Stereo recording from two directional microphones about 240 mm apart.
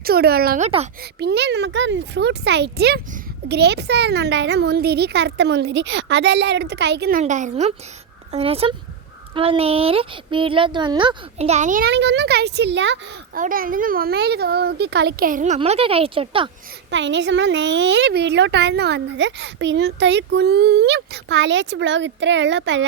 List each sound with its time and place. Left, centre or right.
0.0 s a child's voice: right
13.4 s a child's voice: right
16.9 s a woman's voice: right